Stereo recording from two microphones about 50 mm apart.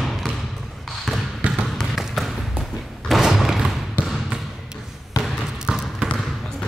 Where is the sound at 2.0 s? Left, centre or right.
Centre.